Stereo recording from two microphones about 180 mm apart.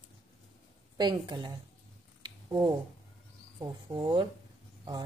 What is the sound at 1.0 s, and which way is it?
Speech, 25° right (ahead or behind).